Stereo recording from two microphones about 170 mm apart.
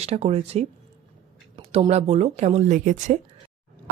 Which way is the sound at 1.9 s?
40° right (ahead or behind).